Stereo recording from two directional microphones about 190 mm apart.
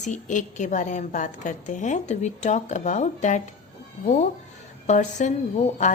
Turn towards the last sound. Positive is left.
turn(degrees=40)  # may be behind; listen again after turning